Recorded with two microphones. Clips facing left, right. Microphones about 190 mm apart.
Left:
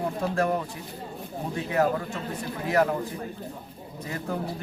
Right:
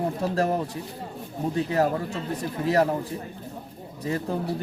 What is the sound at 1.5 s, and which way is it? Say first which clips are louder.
Speech: right 1 dB; 35° right (ahead or behind).